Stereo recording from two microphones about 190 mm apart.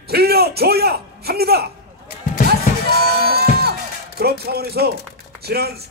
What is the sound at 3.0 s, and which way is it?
Music, 55° right (ahead or behind).